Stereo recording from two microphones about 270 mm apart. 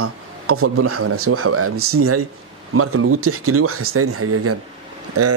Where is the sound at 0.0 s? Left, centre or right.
Right.